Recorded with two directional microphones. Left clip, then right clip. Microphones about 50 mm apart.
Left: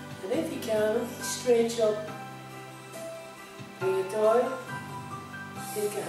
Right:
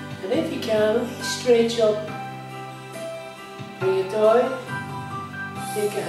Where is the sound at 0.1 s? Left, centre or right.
Centre.